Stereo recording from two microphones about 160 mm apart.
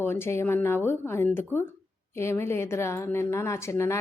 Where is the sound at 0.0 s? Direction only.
15° left (ahead or behind).